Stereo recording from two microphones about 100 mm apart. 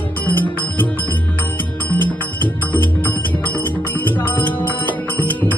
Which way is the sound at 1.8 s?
20° left (ahead or behind).